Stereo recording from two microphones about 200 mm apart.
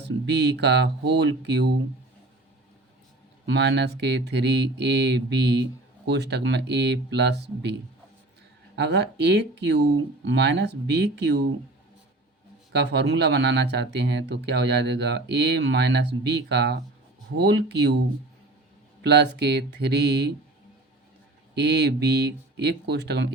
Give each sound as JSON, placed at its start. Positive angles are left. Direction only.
{"t": 0.0, "sound": "speech", "side_deg": -60}
{"t": 3.4, "sound": "speech", "side_deg": -60}
{"t": 12.7, "sound": "speech", "side_deg": -55}
{"t": 19.0, "sound": "speech", "side_deg": -55}
{"t": 21.5, "sound": "speech", "side_deg": -55}